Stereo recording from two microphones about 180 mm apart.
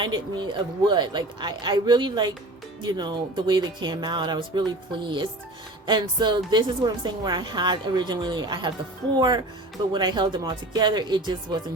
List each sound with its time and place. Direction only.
0.0 s a woman's voice: 25° right (ahead or behind)